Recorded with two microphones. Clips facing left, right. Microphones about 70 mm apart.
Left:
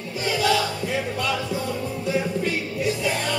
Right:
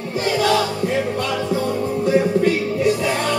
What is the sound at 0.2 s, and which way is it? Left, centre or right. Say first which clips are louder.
Music: right 4 dB; right.